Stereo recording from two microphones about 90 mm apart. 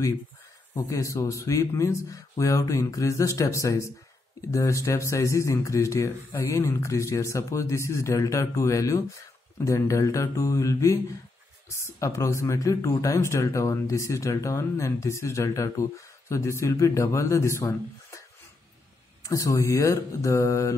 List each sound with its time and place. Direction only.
0.7 s speech: 35° left (ahead or behind)
19.2 s speech: 35° left (ahead or behind)